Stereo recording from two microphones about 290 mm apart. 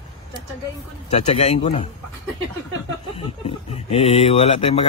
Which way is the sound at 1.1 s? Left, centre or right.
Left.